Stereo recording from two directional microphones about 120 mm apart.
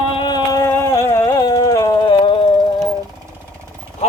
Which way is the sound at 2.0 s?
50° left (ahead or behind).